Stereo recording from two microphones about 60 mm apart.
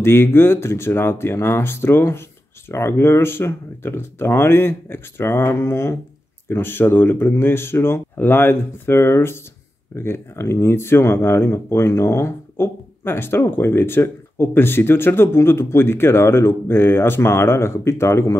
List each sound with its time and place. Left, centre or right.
0.0 s speech: left
6.5 s speech: left